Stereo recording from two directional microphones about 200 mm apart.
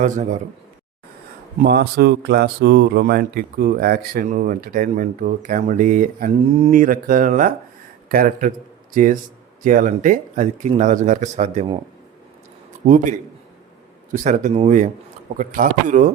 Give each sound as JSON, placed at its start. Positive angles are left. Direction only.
{"t": 0.0, "sound": "speech", "side_deg": -35}
{"t": 1.6, "sound": "speech", "side_deg": -50}
{"t": 9.6, "sound": "speech", "side_deg": -40}
{"t": 12.8, "sound": "speech", "side_deg": -40}